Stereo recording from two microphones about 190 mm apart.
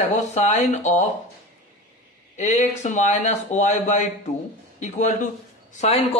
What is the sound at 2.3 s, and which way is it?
A man's voice, 35° left (ahead or behind).